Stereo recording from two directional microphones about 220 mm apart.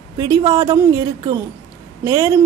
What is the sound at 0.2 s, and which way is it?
Speech, 15° right (ahead or behind).